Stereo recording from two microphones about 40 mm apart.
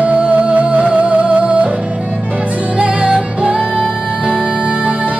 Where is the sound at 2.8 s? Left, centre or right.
Right.